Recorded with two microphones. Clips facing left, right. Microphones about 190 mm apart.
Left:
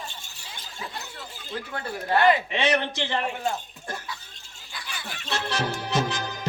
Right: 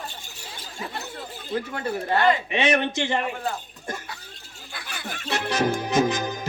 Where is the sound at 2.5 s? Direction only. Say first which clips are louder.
Right 2 dB; 15° right (ahead or behind).